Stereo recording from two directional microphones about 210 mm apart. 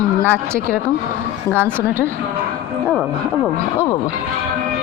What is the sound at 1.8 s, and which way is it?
Speech, 10° right (ahead or behind).